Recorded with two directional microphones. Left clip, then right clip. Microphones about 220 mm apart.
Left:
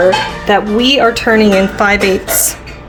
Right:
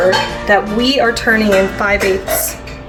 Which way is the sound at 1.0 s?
45° left (ahead or behind).